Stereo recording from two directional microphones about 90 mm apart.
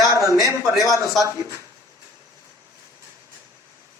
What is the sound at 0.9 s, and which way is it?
Speech, 35° right (ahead or behind).